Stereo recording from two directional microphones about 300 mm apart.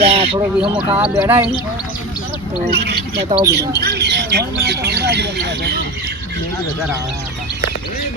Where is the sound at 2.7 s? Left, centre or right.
Right.